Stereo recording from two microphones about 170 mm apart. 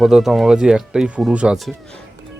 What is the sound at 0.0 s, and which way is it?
Speech, centre (ahead or behind).